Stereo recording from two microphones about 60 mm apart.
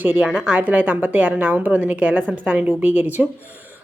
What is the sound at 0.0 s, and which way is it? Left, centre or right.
Speech, right.